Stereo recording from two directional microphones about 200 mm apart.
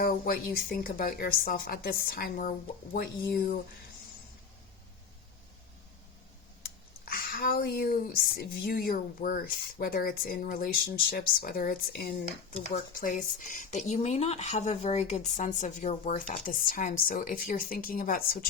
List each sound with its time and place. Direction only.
0.0 s speech: 45° left (ahead or behind)
7.0 s speech: 50° left (ahead or behind)